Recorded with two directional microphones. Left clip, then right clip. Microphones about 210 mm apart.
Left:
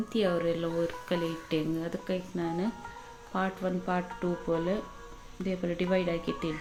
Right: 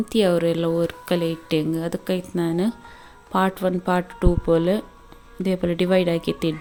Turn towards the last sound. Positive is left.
turn(degrees=-55)  # may be behind; listen again after turning